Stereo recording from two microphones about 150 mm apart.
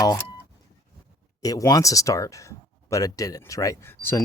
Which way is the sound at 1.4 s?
25° left (ahead or behind).